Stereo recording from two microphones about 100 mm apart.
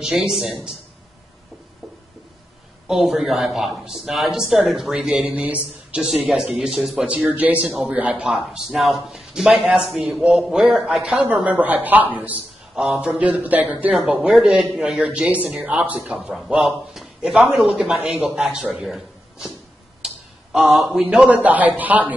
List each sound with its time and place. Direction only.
0.0 s speech: 5° right (ahead or behind)
2.9 s speech: centre (ahead or behind)
7.6 s speech: 5° right (ahead or behind)
7.9 s speech: 15° right (ahead or behind)
8.3 s speech: 5° right (ahead or behind)
18.9 s a sound: 5° right (ahead or behind)
20.7 s speech: 5° right (ahead or behind)